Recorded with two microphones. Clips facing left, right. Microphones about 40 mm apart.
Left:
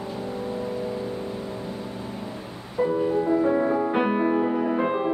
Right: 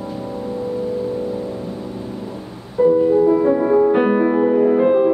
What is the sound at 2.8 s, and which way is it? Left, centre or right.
Music, centre.